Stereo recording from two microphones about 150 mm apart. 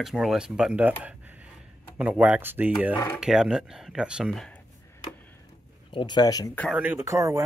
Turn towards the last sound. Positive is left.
turn(degrees=-20)  # may be behind; listen again after turning